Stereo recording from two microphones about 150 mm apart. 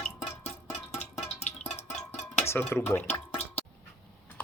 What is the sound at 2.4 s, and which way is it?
Speech, 15° left (ahead or behind).